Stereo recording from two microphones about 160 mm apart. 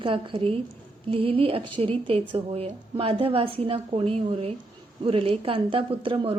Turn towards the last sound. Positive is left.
turn(degrees=-35)  # may be behind; listen again after turning